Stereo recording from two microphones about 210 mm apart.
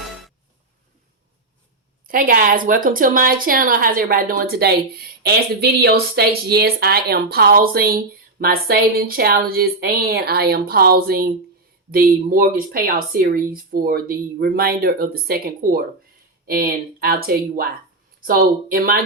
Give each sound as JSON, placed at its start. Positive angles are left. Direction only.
{"t": 2.0, "sound": "a woman's voice", "side_deg": -40}